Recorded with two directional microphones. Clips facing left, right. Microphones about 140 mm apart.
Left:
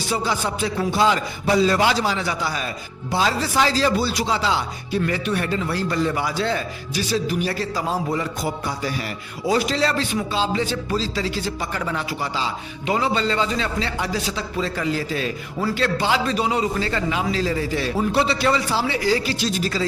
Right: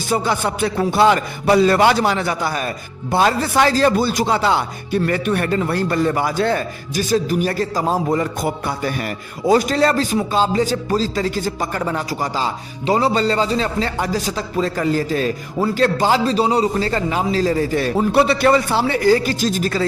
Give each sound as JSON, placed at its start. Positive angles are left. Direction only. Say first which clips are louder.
{"t": 0.1, "sound": "a man's voice", "louder": "right 5 dB", "side_deg": -55}